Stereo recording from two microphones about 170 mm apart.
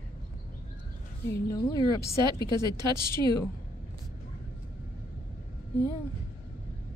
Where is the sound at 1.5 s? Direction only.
25° left (ahead or behind).